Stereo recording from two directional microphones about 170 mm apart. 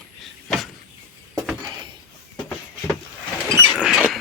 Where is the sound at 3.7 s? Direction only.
5° right (ahead or behind).